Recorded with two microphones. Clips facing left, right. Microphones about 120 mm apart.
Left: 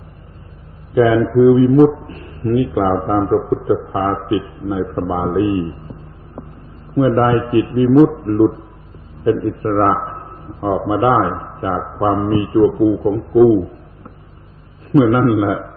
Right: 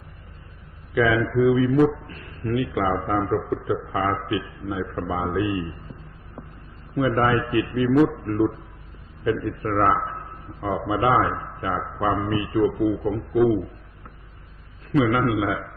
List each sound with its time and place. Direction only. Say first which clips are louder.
0.9 s a man's voice: left 8 dB; 30° left (ahead or behind)
6.9 s a man's voice: left 7 dB; 30° left (ahead or behind)
14.9 s a man's voice: left 8 dB; 30° left (ahead or behind)